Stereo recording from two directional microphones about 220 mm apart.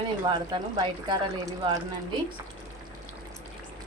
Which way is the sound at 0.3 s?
20° right (ahead or behind).